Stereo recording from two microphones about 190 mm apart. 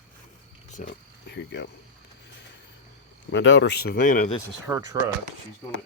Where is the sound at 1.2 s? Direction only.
65° left (ahead or behind).